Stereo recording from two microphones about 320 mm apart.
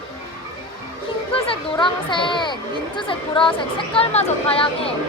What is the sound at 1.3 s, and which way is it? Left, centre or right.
Speech, centre.